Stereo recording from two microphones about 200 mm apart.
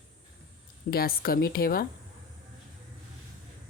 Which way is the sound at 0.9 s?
50° left (ahead or behind).